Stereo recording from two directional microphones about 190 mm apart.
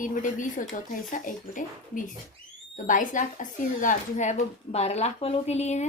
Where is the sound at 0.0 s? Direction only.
45° left (ahead or behind).